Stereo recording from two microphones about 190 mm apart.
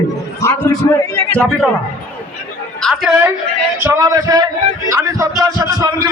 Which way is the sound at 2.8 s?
Centre (ahead or behind).